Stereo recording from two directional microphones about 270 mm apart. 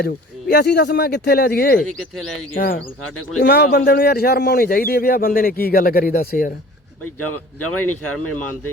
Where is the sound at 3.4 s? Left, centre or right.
Left.